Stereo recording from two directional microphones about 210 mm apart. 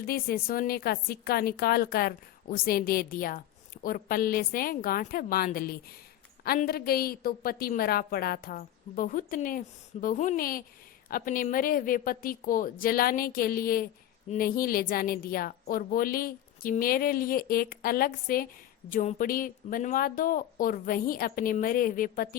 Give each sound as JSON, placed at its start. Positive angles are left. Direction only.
{"t": 0.0, "sound": "a woman's voice", "side_deg": 45}